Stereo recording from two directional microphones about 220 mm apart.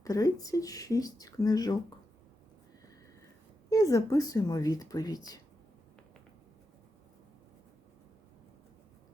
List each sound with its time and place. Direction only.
0.0 s speech: 15° left (ahead or behind)
3.7 s speech: 15° left (ahead or behind)